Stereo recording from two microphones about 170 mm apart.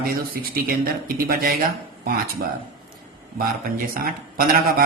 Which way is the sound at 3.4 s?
60° right (ahead or behind).